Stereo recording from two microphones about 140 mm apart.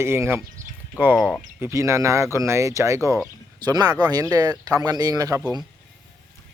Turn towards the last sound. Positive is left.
turn(degrees=-25)  # may be behind; listen again after turning